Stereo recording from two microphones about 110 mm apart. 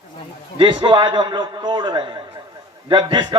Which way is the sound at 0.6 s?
45° right (ahead or behind).